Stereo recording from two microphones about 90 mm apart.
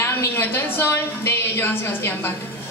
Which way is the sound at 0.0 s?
25° left (ahead or behind).